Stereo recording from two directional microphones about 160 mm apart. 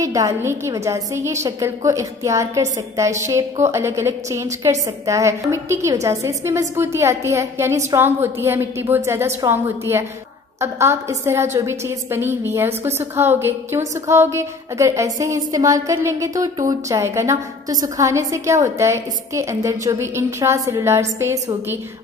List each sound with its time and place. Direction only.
0.0 s a woman's voice: 20° right (ahead or behind)